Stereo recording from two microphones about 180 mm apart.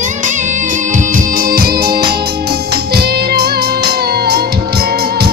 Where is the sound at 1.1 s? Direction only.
55° right (ahead or behind).